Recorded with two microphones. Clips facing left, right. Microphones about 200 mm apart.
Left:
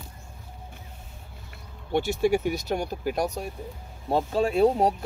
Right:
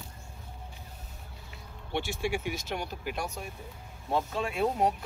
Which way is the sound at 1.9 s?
40° left (ahead or behind).